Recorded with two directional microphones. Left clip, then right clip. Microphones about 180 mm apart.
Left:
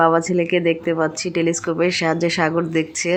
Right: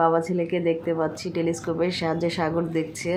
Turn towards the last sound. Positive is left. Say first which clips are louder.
# left 6 dB
turn(degrees=15)  # may be behind; listen again after turning